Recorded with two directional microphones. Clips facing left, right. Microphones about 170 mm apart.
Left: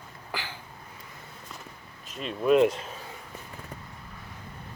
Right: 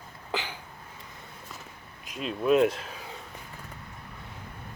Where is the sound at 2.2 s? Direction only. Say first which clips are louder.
Left 1 dB; centre (ahead or behind).